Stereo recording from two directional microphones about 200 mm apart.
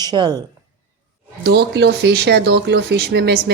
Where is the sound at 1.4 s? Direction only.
55° right (ahead or behind).